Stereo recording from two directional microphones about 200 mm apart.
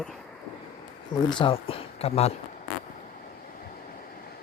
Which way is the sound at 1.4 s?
25° left (ahead or behind).